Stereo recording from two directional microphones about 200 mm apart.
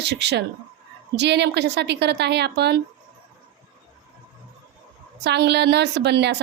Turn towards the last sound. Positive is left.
turn(degrees=-55)  # may be behind; listen again after turning